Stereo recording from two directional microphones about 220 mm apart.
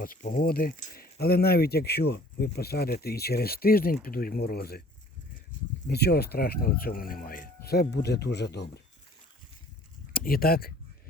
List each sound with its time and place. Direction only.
0.0 s speech: 40° left (ahead or behind)
5.9 s speech: 45° left (ahead or behind)
10.1 s speech: 40° left (ahead or behind)